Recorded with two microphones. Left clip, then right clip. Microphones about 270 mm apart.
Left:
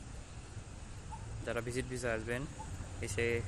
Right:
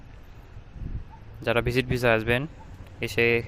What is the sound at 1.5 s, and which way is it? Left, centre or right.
Speech, right.